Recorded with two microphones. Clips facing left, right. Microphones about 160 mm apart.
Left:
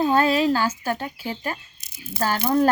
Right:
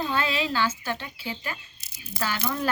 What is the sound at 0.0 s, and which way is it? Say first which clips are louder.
Speech: left 8 dB; 45° left (ahead or behind).